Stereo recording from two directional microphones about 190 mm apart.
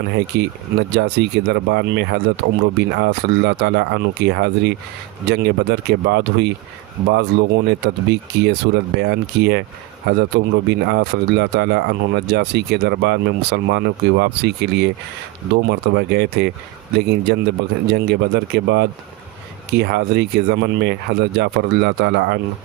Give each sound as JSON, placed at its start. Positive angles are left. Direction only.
{"t": 0.1, "sound": "speech", "side_deg": -65}